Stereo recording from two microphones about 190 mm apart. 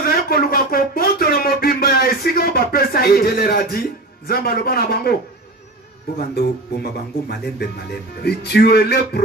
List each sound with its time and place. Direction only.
0.0 s a sound: 50° left (ahead or behind)
4.3 s a man's voice: 55° left (ahead or behind)
6.1 s speech: 55° left (ahead or behind)